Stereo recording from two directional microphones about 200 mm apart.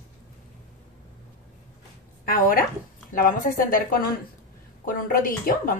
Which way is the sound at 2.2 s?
45° left (ahead or behind).